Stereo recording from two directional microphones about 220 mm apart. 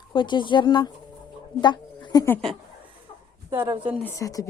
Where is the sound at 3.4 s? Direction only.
15° right (ahead or behind).